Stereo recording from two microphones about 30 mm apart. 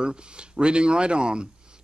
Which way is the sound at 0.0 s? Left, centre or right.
Right.